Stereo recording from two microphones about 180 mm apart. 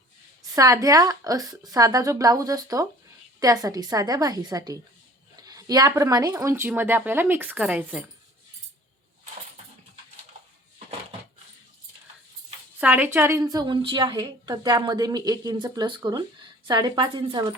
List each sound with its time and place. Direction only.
0.4 s a woman's voice: 20° right (ahead or behind)
12.8 s a woman's voice: 10° right (ahead or behind)